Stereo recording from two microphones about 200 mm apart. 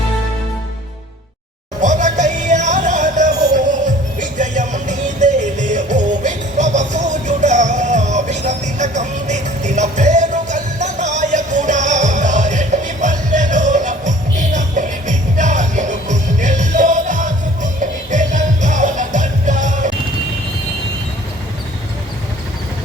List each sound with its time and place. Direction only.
1.8 s music: 40° right (ahead or behind)